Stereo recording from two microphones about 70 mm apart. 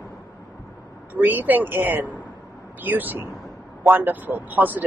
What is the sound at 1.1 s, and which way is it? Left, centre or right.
Speech, right.